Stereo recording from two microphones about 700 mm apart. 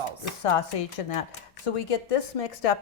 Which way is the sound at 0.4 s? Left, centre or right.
Left.